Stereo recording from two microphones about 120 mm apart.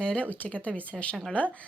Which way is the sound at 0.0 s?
10° left (ahead or behind).